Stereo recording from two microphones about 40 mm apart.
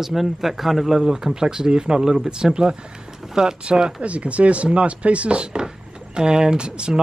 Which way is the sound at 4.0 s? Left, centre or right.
Right.